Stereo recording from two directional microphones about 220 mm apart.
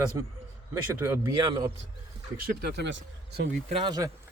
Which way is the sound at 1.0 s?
10° right (ahead or behind).